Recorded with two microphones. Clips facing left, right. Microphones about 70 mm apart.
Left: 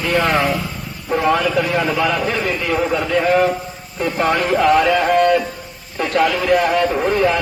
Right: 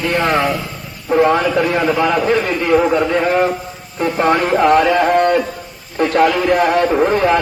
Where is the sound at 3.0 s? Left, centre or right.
Right.